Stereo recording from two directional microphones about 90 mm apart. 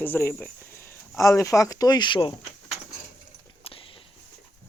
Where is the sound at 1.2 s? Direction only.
35° left (ahead or behind); by 2.3 s 60° left (ahead or behind).